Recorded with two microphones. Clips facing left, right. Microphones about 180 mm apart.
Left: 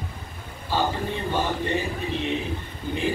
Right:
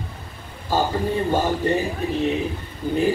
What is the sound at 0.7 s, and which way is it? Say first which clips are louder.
Speech: right 3 dB; 45° right (ahead or behind).